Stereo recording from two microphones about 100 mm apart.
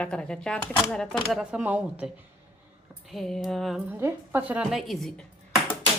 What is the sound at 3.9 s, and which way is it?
Speech, 25° right (ahead or behind).